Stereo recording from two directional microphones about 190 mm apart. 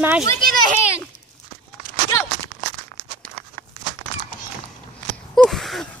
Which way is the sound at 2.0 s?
15° left (ahead or behind).